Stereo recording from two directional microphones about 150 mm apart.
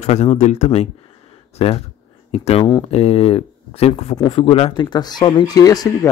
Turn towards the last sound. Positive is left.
turn(degrees=25)  # may be behind; listen again after turning